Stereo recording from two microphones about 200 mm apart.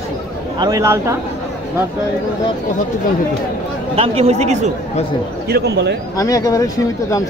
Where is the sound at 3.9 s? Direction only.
30° right (ahead or behind).